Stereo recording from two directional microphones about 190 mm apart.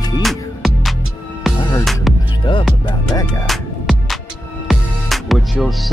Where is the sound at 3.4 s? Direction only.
Centre (ahead or behind).